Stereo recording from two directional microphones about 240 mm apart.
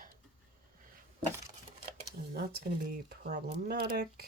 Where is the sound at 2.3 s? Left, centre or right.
Right.